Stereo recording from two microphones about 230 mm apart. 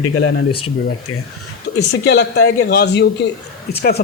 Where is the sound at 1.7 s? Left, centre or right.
Left.